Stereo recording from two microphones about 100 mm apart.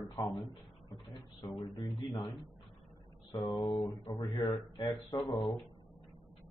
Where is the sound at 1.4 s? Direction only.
50° left (ahead or behind).